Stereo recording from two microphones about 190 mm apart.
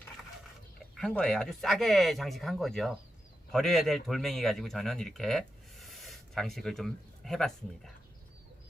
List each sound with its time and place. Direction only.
0.9 s speech: 5° left (ahead or behind)